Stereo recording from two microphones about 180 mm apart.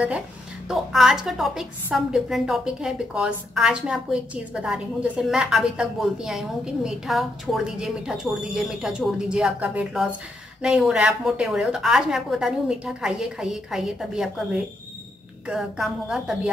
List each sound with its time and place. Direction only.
0.7 s a woman's voice: 5° right (ahead or behind)